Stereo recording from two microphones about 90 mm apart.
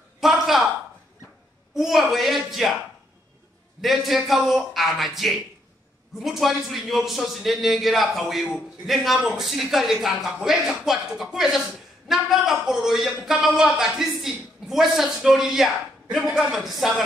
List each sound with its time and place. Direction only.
0.2 s a sound: 5° right (ahead or behind)
1.7 s a man's voice: 5° right (ahead or behind)
3.8 s a man's voice: centre (ahead or behind)